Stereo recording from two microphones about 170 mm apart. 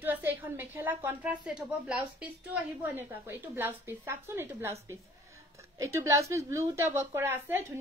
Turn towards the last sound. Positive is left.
turn(degrees=-15)  # may be behind; listen again after turning